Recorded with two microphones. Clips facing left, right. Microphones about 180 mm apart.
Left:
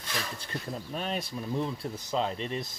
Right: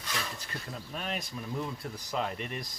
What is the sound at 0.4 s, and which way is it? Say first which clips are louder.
Speech: left 5 dB; 30° left (ahead or behind).